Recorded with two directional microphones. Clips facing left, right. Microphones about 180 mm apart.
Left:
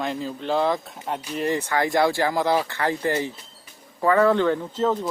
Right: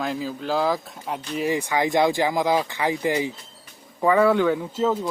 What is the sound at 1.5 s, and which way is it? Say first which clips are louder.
Speech: even; 10° right (ahead or behind).